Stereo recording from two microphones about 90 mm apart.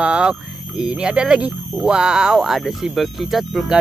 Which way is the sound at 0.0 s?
10° right (ahead or behind).